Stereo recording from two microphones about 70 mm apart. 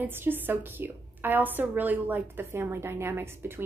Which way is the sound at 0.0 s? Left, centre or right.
Right.